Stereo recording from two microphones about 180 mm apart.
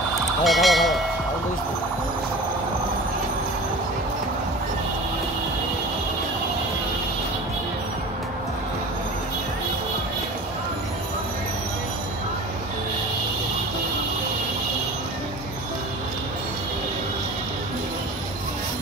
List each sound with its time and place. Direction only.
0.4 s speech: centre (ahead or behind)